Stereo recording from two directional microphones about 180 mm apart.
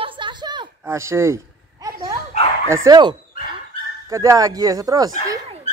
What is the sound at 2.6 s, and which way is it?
Speech, 15° right (ahead or behind).